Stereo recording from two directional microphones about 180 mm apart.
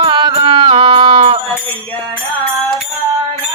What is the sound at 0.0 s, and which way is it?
Music, 25° right (ahead or behind).